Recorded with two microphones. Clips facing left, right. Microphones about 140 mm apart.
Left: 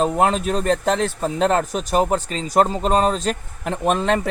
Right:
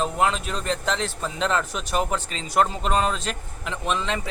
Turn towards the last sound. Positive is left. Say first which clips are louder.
# left 7 dB
turn(degrees=55)  # may be behind; listen again after turning